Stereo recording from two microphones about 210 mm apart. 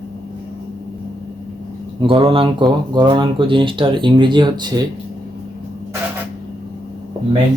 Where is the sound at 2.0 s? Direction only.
25° right (ahead or behind).